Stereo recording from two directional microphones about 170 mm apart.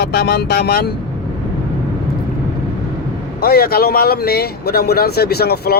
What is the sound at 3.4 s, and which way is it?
Speech, 65° left (ahead or behind).